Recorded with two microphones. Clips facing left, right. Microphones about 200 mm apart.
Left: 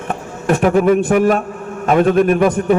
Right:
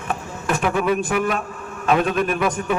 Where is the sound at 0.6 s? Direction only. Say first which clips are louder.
Left 8 dB; 45° left (ahead or behind).